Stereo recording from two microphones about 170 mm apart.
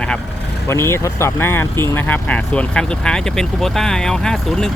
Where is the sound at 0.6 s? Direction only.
15° left (ahead or behind).